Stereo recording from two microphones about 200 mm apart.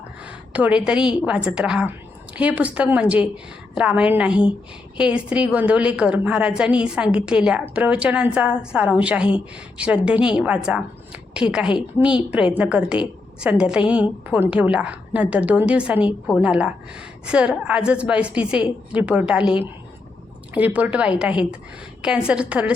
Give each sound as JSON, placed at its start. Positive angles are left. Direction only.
{"t": 0.3, "sound": "a woman's voice", "side_deg": -5}